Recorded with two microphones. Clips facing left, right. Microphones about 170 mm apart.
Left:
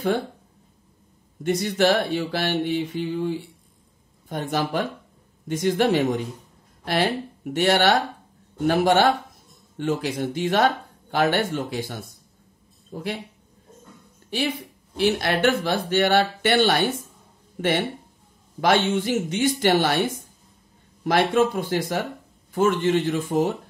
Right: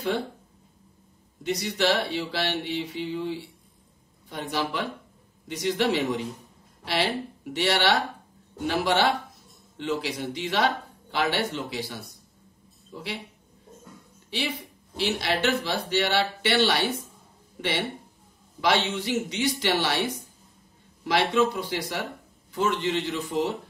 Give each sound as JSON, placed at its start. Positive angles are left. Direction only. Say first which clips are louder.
{"t": 1.4, "sound": "speech", "louder": "left 5 dB", "side_deg": 50}
{"t": 15.0, "sound": "speech", "louder": "left 5 dB", "side_deg": 50}